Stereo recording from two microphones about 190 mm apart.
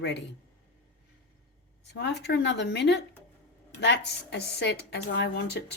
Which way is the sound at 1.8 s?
65° left (ahead or behind).